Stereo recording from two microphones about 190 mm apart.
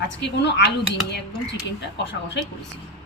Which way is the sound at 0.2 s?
65° left (ahead or behind).